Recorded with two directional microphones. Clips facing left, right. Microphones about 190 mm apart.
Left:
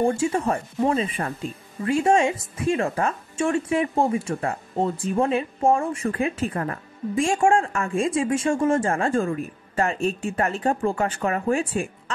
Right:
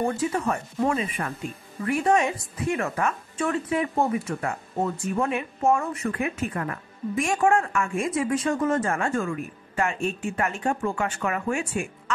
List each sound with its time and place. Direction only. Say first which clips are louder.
0.0 s speech: left 3 dB; 25° left (ahead or behind)